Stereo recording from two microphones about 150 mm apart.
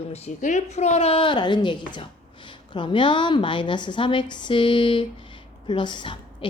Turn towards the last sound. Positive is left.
turn(degrees=35)  # may be behind; listen again after turning